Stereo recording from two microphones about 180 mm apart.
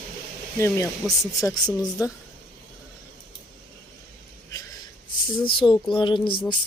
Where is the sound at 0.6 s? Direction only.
15° left (ahead or behind).